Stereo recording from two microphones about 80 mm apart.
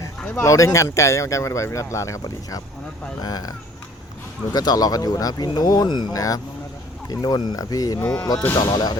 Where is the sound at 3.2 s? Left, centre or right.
Left.